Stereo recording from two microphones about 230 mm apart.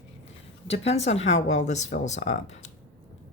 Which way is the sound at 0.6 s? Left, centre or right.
Left.